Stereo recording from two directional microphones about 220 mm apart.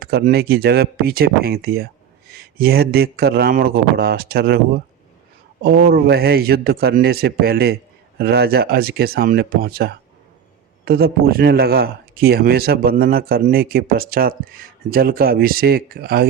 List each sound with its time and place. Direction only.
0.0 s speech: 45° right (ahead or behind)
5.6 s speech: 45° right (ahead or behind)